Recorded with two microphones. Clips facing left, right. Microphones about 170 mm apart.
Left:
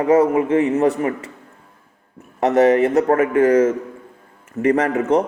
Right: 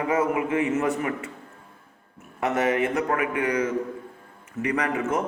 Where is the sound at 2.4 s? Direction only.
35° left (ahead or behind).